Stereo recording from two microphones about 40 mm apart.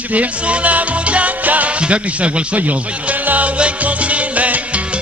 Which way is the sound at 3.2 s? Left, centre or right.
Right.